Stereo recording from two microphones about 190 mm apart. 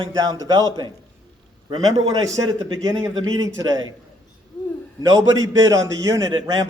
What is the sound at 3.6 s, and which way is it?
Speech, 20° right (ahead or behind).